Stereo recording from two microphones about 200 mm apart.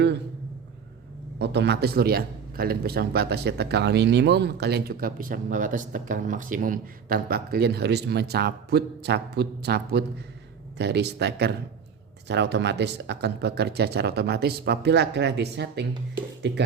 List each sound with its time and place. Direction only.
1.4 s a man's voice: 55° right (ahead or behind)